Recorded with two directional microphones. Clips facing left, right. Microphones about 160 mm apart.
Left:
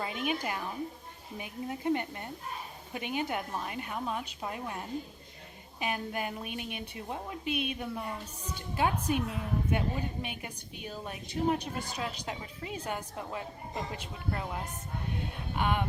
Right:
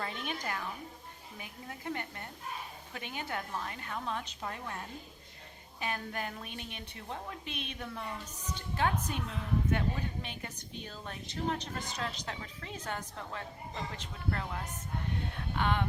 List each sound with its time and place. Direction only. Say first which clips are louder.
0.0 s a woman's voice: left 5 dB; 10° left (ahead or behind)